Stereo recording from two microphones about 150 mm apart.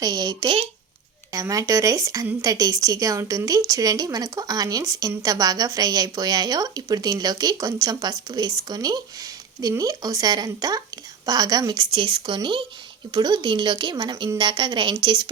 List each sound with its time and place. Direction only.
0.0 s speech: 25° right (ahead or behind)